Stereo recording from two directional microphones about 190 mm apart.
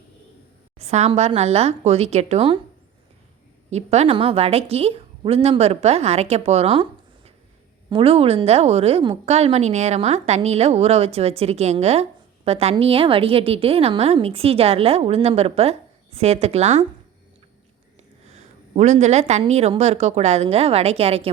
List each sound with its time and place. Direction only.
0.8 s a woman's voice: 35° right (ahead or behind)
3.7 s a woman's voice: 35° right (ahead or behind)
7.9 s a woman's voice: 30° right (ahead or behind)
18.3 s a woman's voice: 35° right (ahead or behind)